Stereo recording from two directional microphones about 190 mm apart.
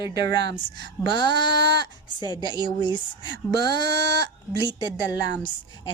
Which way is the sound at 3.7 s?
60° right (ahead or behind).